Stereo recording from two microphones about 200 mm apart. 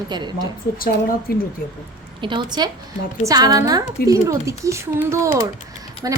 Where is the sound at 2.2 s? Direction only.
20° right (ahead or behind).